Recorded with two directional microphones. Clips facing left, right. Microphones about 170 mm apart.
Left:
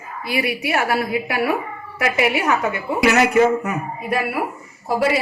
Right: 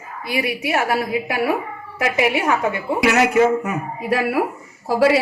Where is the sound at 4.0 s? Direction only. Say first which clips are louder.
Right 5 dB; 90° right.